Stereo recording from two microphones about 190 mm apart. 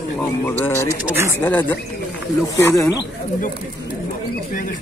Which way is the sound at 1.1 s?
15° right (ahead or behind).